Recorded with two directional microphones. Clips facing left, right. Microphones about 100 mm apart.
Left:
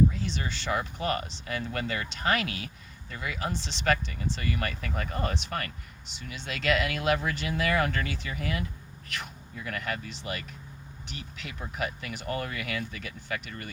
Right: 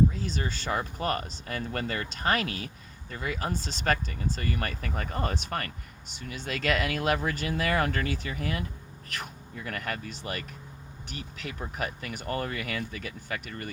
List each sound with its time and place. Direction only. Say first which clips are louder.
0.1 s speech: right 1 dB; 40° right (ahead or behind)